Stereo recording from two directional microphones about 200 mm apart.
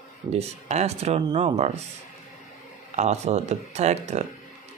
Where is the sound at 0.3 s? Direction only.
35° right (ahead or behind).